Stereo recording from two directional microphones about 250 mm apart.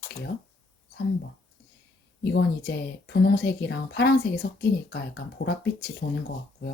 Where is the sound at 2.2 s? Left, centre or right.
Left.